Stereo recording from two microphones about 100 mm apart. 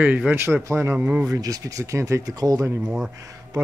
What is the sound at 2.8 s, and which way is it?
Speech, 10° right (ahead or behind).